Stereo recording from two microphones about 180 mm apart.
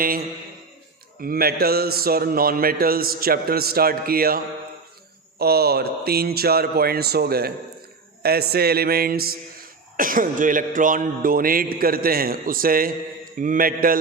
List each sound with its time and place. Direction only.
1.2 s a man's voice: 55° right (ahead or behind)